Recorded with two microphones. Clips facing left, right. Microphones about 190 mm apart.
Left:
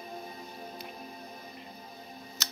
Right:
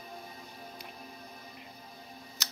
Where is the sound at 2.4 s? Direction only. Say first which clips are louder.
Left 2 dB; 15° right (ahead or behind).